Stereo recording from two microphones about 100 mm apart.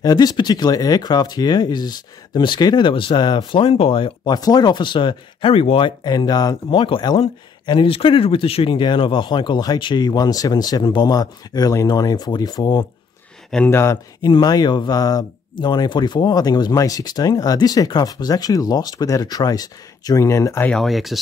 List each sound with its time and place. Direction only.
0.0 s speech: 40° left (ahead or behind)
4.4 s speech: 40° left (ahead or behind); by 5.9 s 65° left (ahead or behind)
6.0 s speech: 40° left (ahead or behind)
6.7 s speech: 55° left (ahead or behind)
13.7 s speech: 25° left (ahead or behind)
14.2 s speech: 45° left (ahead or behind); by 20.6 s 30° left (ahead or behind)
20.8 s speech: centre (ahead or behind)